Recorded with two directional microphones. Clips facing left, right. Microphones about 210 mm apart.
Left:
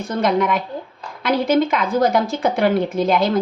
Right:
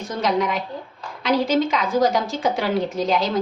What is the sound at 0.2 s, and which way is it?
A woman's voice, 55° left (ahead or behind).